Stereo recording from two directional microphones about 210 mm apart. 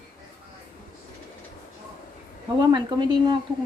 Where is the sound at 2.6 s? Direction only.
20° right (ahead or behind).